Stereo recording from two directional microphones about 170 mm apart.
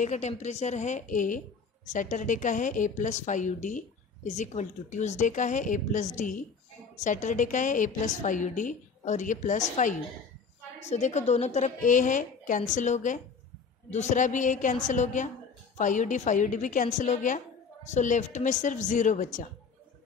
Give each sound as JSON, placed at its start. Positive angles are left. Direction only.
{"t": 0.0, "sound": "a woman's voice", "side_deg": 45}